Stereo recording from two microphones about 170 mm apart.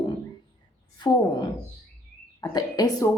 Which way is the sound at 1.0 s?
25° left (ahead or behind).